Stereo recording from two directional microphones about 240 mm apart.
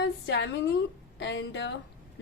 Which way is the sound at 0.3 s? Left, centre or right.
Left.